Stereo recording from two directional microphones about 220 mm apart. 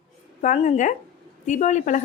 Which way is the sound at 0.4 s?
30° left (ahead or behind).